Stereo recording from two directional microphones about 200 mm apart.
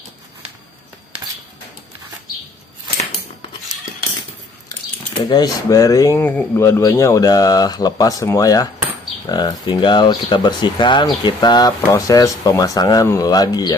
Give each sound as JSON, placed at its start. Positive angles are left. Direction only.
{"t": 5.3, "sound": "speech", "side_deg": 20}